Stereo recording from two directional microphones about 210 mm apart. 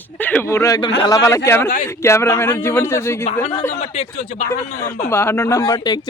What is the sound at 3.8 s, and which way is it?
Speech, 30° left (ahead or behind).